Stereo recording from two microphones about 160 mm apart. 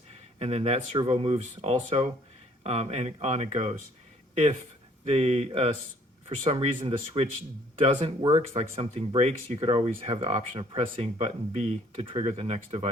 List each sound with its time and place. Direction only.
0.3 s speech: 40° right (ahead or behind)
5.0 s speech: 40° right (ahead or behind)
8.8 s speech: 40° right (ahead or behind)